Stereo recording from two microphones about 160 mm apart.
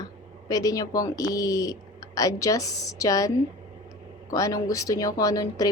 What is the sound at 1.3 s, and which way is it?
A woman's voice, 20° left (ahead or behind).